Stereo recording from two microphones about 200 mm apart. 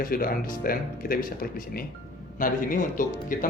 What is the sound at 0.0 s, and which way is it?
Speech, 45° left (ahead or behind).